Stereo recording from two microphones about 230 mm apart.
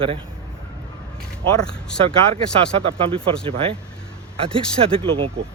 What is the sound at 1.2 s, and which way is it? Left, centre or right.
Speech, centre.